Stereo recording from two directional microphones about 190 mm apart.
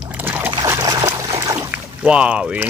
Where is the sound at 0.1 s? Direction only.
10° right (ahead or behind).